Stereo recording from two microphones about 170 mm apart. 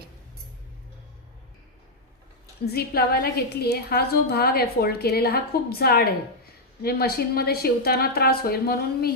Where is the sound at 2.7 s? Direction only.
65° left (ahead or behind).